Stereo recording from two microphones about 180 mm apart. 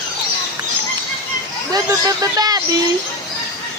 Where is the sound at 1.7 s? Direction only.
20° right (ahead or behind).